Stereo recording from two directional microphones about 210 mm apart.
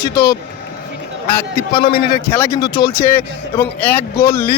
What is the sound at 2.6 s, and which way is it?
Speech, 20° left (ahead or behind).